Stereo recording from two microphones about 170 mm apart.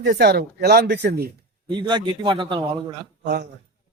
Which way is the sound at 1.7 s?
25° right (ahead or behind).